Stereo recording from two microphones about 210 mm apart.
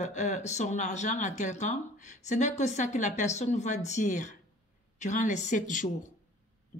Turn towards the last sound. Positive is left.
turn(degrees=35)  # may be behind; listen again after turning